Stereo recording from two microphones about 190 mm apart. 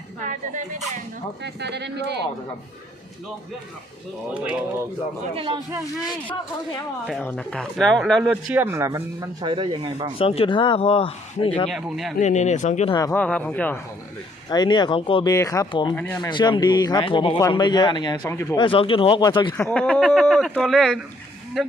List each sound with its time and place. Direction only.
1.4 s speech: 65° right (ahead or behind)
4.4 s speech: 5° right (ahead or behind)
5.3 s speech: 30° right (ahead or behind)
7.1 s speech: 5° left (ahead or behind)
8.3 s speech: 10° right (ahead or behind); by 10.1 s 25° right (ahead or behind)
10.2 s speech: 30° left (ahead or behind)
11.7 s speech: centre (ahead or behind)
12.2 s speech: 40° left (ahead or behind)
12.9 s speech: 20° left (ahead or behind)
13.1 s speech: 5° left (ahead or behind)
14.5 s speech: 20° left (ahead or behind)
18.5 s speech: 25° left (ahead or behind)
19.5 s speech: 5° left (ahead or behind)